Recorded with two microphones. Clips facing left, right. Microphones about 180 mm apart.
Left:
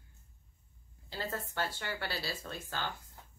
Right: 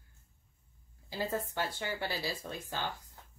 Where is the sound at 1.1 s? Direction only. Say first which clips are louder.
Right 4 dB; 15° right (ahead or behind).